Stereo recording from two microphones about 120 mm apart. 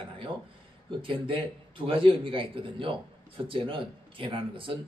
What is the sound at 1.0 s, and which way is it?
Speech, 50° right (ahead or behind).